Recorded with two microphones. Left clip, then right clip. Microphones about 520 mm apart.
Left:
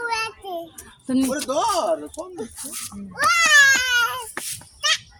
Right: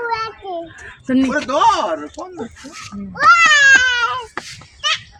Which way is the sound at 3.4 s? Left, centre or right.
Left.